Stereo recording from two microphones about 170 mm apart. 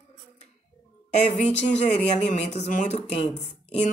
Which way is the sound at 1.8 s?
40° left (ahead or behind).